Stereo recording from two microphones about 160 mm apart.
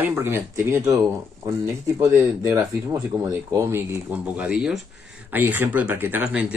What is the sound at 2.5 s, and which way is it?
Speech, 15° right (ahead or behind).